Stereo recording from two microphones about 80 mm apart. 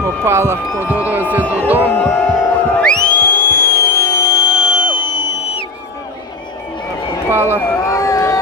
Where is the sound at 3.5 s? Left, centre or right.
Left.